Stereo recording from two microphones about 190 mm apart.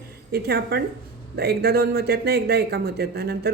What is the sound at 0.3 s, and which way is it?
Speech, 55° right (ahead or behind).